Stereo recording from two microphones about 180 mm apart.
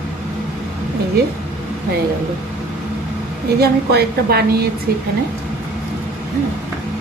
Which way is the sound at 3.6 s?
60° right (ahead or behind).